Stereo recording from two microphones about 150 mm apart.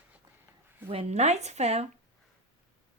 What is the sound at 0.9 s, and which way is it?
Speech, 45° right (ahead or behind).